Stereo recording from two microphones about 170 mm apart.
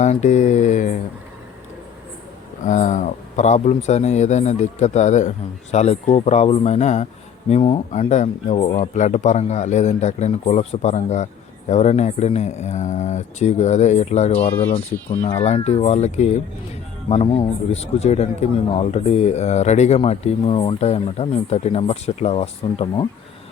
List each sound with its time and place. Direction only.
0.0 s speech: 45° left (ahead or behind)
2.6 s speech: 45° left (ahead or behind)
14.9 s speech: 10° left (ahead or behind)
15.4 s speech: 40° left (ahead or behind)